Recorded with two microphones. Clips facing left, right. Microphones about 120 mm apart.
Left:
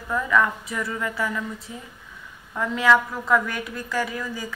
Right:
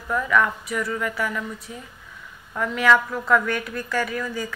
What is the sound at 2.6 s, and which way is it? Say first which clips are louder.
A woman's voice: even; 20° left (ahead or behind).